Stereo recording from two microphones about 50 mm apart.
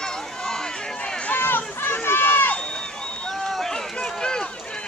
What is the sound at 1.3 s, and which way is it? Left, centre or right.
Run, left.